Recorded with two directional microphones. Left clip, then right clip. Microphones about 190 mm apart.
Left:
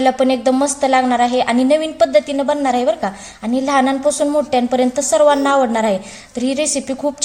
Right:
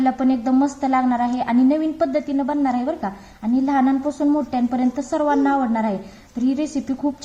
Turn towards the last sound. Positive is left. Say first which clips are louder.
# left 5 dB
turn(degrees=45)  # may be behind; listen again after turning